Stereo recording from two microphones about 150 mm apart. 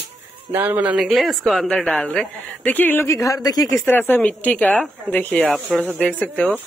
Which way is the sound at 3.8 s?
15° left (ahead or behind).